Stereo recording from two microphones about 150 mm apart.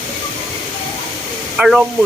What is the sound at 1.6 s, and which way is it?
Speech, 5° right (ahead or behind).